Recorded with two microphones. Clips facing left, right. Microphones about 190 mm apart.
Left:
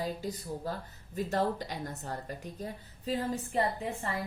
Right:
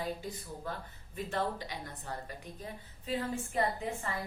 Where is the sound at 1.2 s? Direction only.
45° left (ahead or behind).